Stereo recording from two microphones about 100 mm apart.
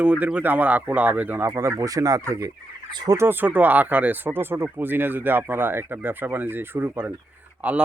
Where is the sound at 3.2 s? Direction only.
20° right (ahead or behind).